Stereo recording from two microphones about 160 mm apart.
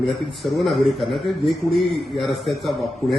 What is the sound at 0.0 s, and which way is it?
A man's voice, centre (ahead or behind).